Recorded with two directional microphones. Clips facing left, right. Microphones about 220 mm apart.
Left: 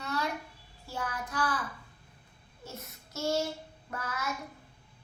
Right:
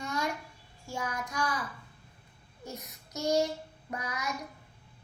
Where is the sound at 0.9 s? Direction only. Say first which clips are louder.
Right 1 dB; 10° right (ahead or behind).